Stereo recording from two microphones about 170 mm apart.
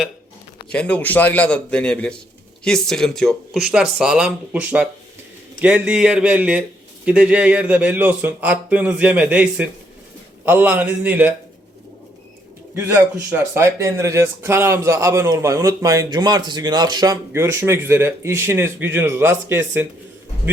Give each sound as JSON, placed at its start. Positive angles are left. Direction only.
{"t": 0.7, "sound": "a man's voice", "side_deg": 5}
{"t": 12.9, "sound": "speech", "side_deg": -15}